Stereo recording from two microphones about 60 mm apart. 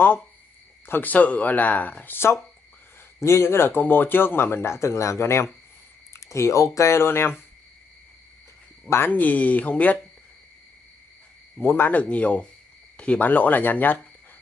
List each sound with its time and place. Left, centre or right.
0.8 s speech: left
1.1 s speech: left
3.2 s speech: left
3.8 s speech: left
8.8 s speech: left
9.1 s speech: left
11.6 s speech: left
11.9 s speech: left
12.9 s cricket: centre
13.2 s speech: left